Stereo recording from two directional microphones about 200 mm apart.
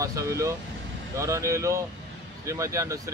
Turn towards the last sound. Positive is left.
turn(degrees=-15)  # may be behind; listen again after turning